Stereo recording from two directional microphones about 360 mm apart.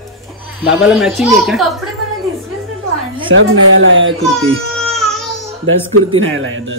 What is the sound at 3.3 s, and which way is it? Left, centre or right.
Speech, right.